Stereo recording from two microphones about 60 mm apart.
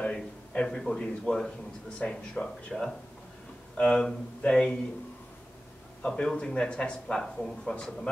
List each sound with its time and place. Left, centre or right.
0.1 s a man's voice: centre
6.0 s speech: centre